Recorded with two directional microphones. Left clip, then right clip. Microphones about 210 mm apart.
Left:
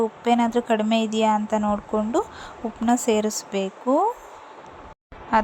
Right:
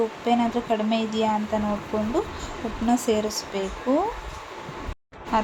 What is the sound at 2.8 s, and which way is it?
Speech, 35° left (ahead or behind).